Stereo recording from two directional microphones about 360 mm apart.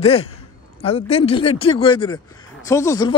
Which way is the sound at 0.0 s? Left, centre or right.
Centre.